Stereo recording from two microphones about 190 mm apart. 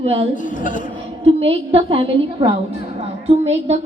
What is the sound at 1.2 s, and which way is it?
A woman's voice, 30° right (ahead or behind).